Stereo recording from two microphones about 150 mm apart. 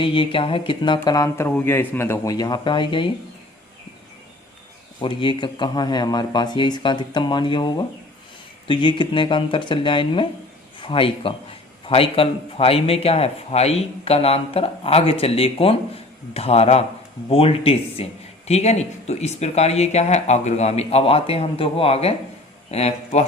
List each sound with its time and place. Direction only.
0.0 s speech: 35° left (ahead or behind)
1.5 s speech: 15° left (ahead or behind); by 3.1 s 35° left (ahead or behind)
4.9 s a man's voice: 35° left (ahead or behind)